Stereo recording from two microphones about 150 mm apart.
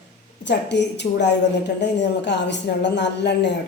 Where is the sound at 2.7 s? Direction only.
90° left.